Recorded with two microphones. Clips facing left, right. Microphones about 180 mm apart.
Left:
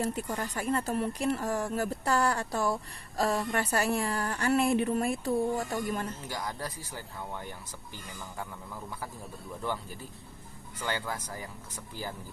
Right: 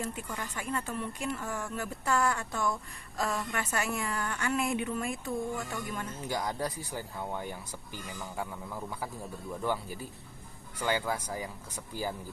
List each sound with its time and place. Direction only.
0.0 s speech: 40° left (ahead or behind)
6.2 s speech: 20° right (ahead or behind)